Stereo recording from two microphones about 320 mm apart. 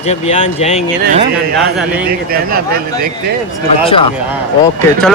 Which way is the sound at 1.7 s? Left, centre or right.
Centre.